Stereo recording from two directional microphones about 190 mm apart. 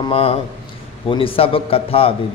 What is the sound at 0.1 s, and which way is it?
A man's voice, 30° left (ahead or behind).